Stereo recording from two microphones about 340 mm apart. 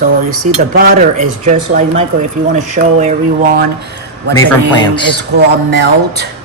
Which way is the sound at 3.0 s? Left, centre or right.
Right.